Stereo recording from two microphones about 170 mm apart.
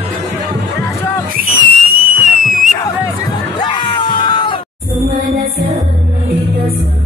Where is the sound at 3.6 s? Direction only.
25° left (ahead or behind).